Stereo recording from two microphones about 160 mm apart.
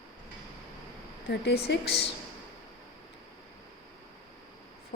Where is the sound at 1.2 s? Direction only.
90° left.